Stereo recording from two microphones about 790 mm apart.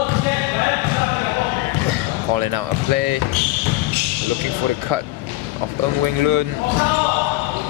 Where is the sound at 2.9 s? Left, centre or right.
Right.